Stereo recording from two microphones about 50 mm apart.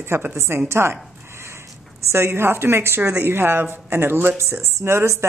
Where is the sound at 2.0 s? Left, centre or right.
Right.